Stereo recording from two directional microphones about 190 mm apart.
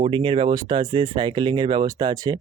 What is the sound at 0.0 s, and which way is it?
Speech, 25° right (ahead or behind).